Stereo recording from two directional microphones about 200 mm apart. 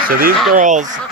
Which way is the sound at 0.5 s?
40° right (ahead or behind).